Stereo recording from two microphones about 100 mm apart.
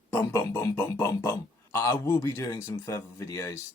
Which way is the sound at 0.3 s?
35° left (ahead or behind).